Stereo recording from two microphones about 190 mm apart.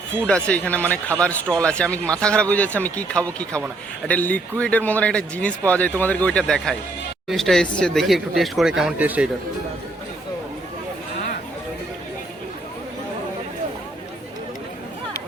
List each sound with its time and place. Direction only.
0.3 s a man's voice: 5° left (ahead or behind)